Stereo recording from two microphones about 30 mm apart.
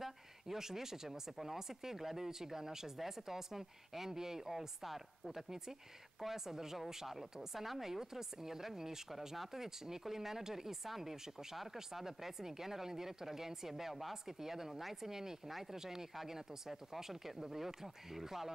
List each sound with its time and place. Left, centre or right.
0.0 s speech: centre
4.5 s speech: centre